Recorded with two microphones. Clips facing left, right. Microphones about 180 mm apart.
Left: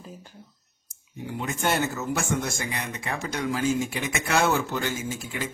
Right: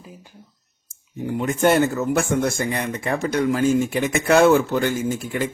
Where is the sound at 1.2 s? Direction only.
50° right (ahead or behind).